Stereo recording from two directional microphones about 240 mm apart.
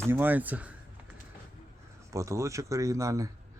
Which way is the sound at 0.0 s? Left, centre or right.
Centre.